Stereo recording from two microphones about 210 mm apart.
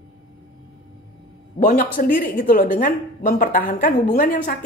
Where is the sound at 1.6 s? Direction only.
40° left (ahead or behind).